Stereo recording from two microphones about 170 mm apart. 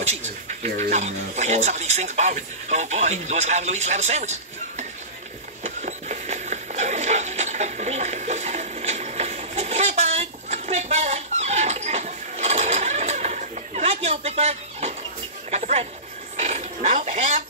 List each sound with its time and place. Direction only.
0.0 s speech: 40° right (ahead or behind)
5.6 s a sound: 45° right (ahead or behind)
16.3 s dog: 45° right (ahead or behind)